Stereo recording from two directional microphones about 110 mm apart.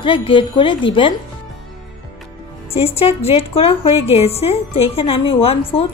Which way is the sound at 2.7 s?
65° left (ahead or behind).